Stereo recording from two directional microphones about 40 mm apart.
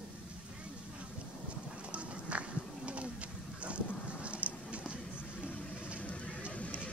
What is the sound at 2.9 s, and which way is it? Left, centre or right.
Vehicle, right.